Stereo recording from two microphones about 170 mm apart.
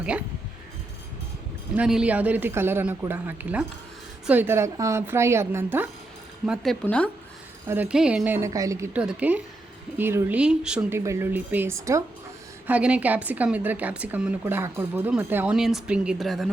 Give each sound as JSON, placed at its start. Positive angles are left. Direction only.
{"t": 1.7, "sound": "speech", "side_deg": -5}
{"t": 6.4, "sound": "speech", "side_deg": 0}
{"t": 7.7, "sound": "speech", "side_deg": -10}